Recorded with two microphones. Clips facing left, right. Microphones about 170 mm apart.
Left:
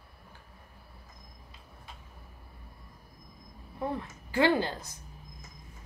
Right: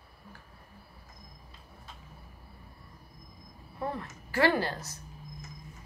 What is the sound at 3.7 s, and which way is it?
Speech, 15° left (ahead or behind).